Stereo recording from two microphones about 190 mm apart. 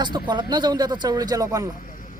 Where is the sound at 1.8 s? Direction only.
45° left (ahead or behind).